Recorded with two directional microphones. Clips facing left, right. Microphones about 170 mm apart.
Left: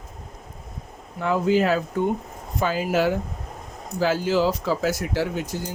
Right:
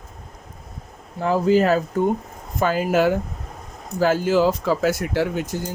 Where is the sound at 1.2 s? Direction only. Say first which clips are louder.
Right 3 dB; 35° right (ahead or behind); by 5.7 s 50° right (ahead or behind).